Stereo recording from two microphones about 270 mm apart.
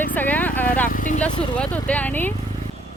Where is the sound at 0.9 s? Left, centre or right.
Left.